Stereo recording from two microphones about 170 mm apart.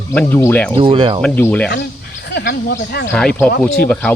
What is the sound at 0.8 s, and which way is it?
Speech, 30° right (ahead or behind).